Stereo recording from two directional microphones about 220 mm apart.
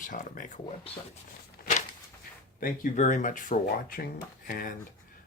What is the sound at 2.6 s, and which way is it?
Speech, 35° left (ahead or behind).